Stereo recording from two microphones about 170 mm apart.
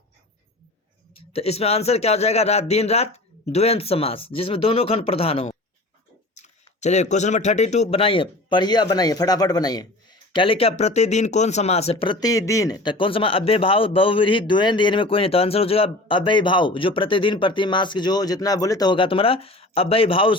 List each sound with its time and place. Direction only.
1.3 s speech: 35° left (ahead or behind)